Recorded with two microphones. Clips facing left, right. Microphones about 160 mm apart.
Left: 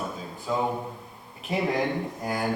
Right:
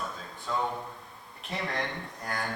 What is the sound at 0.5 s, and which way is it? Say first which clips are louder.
Speech: left 5 dB; 10° left (ahead or behind).